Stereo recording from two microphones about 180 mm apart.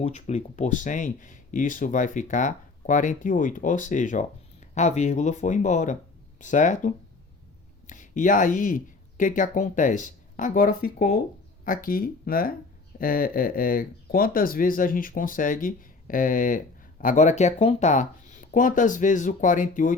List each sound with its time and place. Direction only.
0.0 s speech: 40° left (ahead or behind)